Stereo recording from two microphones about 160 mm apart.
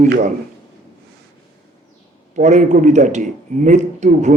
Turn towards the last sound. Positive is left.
turn(degrees=-50)  # may be behind; listen again after turning